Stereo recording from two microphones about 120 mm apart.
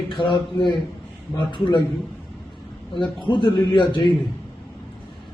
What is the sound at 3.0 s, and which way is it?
Speech, 40° left (ahead or behind).